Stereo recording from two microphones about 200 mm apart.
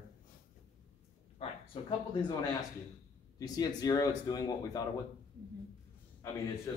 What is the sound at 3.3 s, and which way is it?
Speech, 20° left (ahead or behind).